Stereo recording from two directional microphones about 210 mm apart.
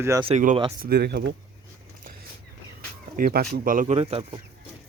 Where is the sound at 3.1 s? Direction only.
45° right (ahead or behind); by 4.4 s 30° right (ahead or behind).